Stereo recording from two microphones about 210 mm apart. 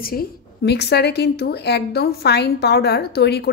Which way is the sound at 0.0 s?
45° left (ahead or behind).